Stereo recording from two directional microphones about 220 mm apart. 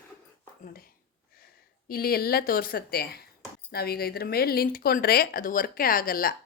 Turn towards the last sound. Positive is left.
turn(degrees=40)  # may be behind; listen again after turning